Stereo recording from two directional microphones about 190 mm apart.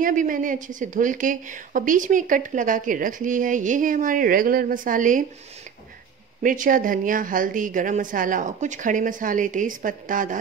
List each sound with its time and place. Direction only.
0.0 s a woman's voice: 45° right (ahead or behind)
6.4 s a woman's voice: 45° right (ahead or behind)